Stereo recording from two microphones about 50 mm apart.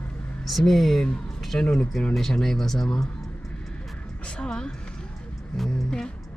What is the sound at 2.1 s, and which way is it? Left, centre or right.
Speech, centre.